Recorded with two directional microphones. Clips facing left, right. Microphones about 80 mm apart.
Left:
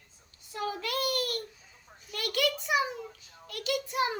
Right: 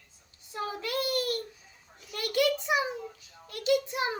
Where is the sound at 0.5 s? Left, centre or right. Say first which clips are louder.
Even; right.